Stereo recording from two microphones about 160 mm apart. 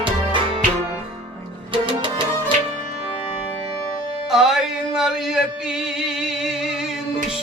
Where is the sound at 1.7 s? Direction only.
30° right (ahead or behind).